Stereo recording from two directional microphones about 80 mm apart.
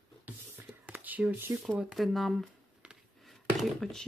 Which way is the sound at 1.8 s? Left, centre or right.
Centre.